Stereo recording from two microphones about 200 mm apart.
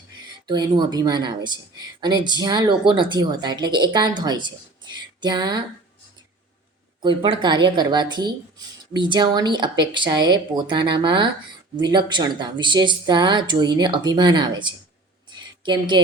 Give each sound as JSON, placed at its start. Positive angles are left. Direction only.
{"t": 0.4, "sound": "a woman's voice", "side_deg": -20}
{"t": 7.0, "sound": "a woman's voice", "side_deg": -25}